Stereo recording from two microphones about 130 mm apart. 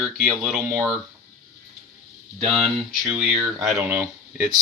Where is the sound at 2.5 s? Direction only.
Centre (ahead or behind).